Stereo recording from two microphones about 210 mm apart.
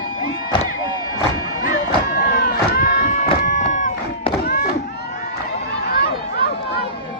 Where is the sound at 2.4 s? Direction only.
40° left (ahead or behind).